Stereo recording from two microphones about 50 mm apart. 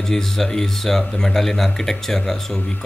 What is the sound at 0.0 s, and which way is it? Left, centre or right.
Speech, centre.